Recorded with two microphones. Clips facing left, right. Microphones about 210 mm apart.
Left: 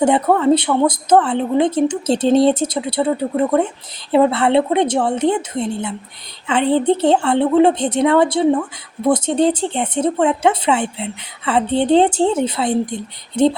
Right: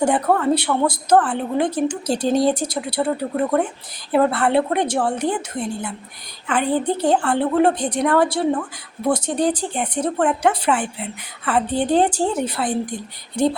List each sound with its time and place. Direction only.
0.0 s speech: 20° left (ahead or behind)